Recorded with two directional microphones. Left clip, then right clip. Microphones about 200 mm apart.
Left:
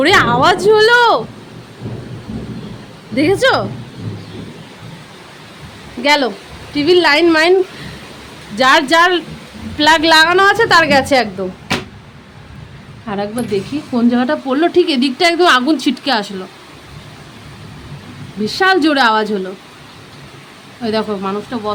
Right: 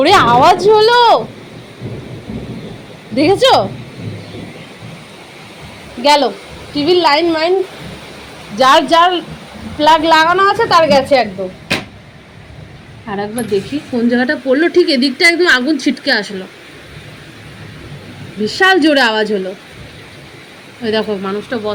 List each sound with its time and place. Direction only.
0.0 s speech: 10° left (ahead or behind)
3.2 s speech: 5° left (ahead or behind)
6.0 s a woman's voice: 15° left (ahead or behind)
8.5 s a woman's voice: 15° left (ahead or behind)
13.1 s speech: 15° left (ahead or behind)
18.4 s speech: 10° left (ahead or behind)
20.8 s speech: 5° left (ahead or behind)